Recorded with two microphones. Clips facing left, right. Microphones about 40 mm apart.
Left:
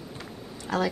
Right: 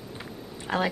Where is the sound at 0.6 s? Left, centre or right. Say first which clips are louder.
Even; right.